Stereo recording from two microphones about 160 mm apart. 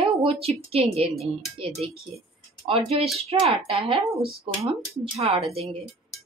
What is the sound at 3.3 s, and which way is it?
A woman's voice, 40° right (ahead or behind).